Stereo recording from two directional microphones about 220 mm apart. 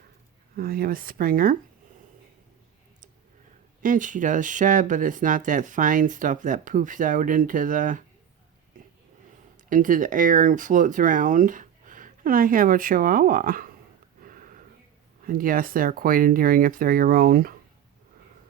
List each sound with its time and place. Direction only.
0.5 s speech: 40° right (ahead or behind)
3.8 s speech: 35° right (ahead or behind)
8.7 s a sound: 35° right (ahead or behind)
9.6 s speech: 35° right (ahead or behind)
14.2 s a sound: 40° right (ahead or behind)
15.2 s speech: 40° right (ahead or behind)